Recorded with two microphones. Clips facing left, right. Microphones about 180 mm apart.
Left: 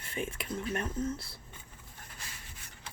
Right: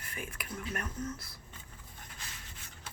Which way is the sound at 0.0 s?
25° left (ahead or behind).